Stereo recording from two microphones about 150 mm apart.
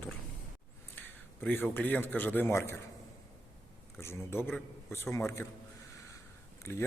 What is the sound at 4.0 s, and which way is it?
A man's voice, 15° left (ahead or behind).